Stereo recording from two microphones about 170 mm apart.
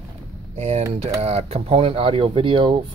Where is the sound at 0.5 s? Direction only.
40° right (ahead or behind).